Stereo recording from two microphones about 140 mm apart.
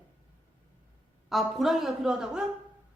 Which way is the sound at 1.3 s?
Centre (ahead or behind).